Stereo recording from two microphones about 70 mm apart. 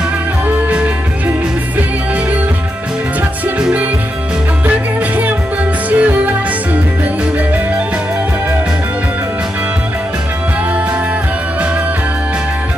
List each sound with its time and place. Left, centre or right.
0.7 s music: centre
4.6 s music: right